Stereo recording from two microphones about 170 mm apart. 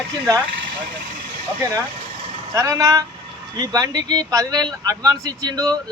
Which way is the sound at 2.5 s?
20° right (ahead or behind).